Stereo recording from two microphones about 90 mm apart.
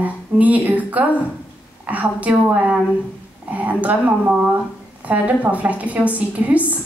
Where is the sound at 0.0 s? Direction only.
15° right (ahead or behind).